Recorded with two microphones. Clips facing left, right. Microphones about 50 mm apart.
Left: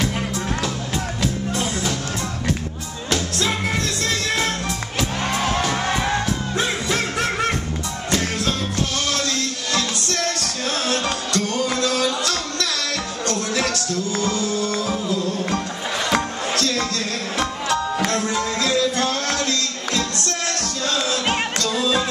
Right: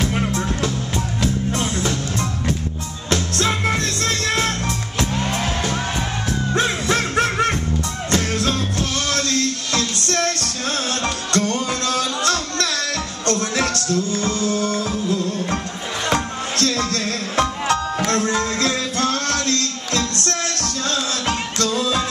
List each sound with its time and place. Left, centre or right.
0.1 s music: right
3.1 s music: right
5.1 s music: left
6.5 s music: right
9.1 s music: right
16.1 s music: right